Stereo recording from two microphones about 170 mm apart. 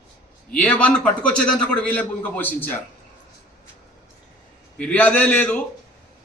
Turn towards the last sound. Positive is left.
turn(degrees=10)  # may be behind; listen again after turning